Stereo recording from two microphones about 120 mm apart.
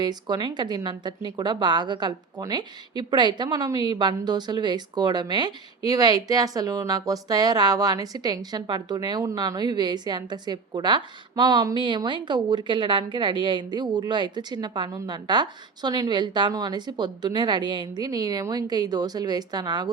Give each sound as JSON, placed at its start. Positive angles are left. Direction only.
{"t": 0.0, "sound": "speech", "side_deg": -35}